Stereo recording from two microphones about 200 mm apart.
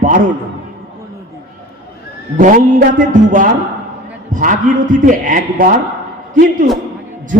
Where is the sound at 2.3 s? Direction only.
40° right (ahead or behind).